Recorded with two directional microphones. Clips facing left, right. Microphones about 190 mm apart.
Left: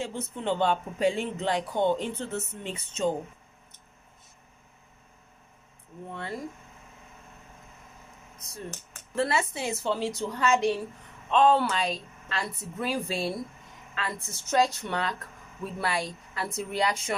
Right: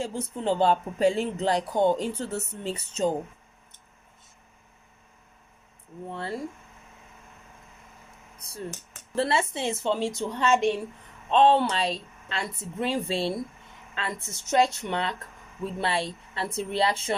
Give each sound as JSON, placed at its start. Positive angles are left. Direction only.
{"t": 0.0, "sound": "speech", "side_deg": -40}
{"t": 6.1, "sound": "speech", "side_deg": -30}
{"t": 9.1, "sound": "a woman's voice", "side_deg": -30}